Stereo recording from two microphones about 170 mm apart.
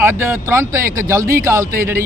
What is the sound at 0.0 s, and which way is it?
Speech, 15° right (ahead or behind).